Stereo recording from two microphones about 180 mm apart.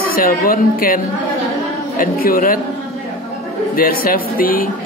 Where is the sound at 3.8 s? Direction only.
55° left (ahead or behind).